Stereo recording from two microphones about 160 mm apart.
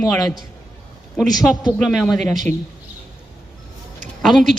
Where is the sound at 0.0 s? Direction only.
20° left (ahead or behind).